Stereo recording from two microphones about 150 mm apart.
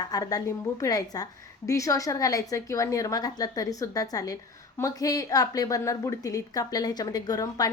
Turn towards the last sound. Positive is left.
turn(degrees=25)  # may be behind; listen again after turning